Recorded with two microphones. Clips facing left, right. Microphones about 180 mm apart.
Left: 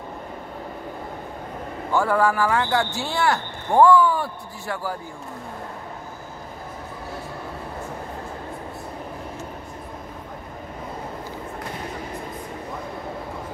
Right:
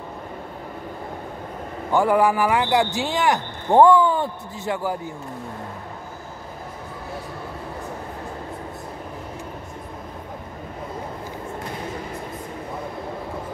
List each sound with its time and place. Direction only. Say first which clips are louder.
1.9 s speech: right 2 dB; 15° right (ahead or behind)